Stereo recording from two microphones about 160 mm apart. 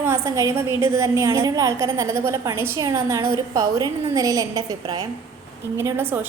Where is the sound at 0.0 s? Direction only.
20° right (ahead or behind).